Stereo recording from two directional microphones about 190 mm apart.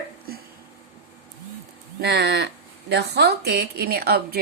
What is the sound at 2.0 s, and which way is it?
A woman's voice, 60° right (ahead or behind).